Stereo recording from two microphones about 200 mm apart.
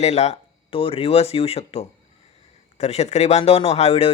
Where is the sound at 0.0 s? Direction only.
35° left (ahead or behind).